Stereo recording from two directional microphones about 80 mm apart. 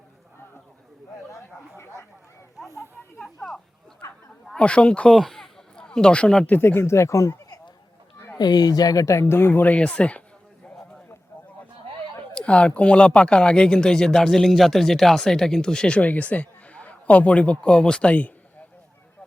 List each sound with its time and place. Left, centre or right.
4.5 s speech: centre
5.1 s a sound: centre
6.5 s speech: left
8.4 s speech: left; by 10.2 s centre
12.3 s speech: centre